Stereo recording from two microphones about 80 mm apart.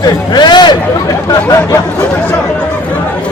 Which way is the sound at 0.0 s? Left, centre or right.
Left.